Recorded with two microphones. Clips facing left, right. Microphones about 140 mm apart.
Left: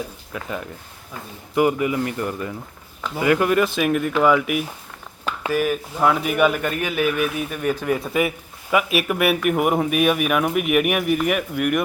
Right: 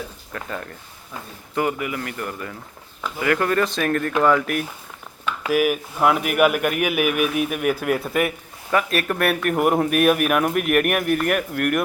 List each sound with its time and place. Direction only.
0.3 s speech: 10° left (ahead or behind)
5.5 s speech: 10° right (ahead or behind)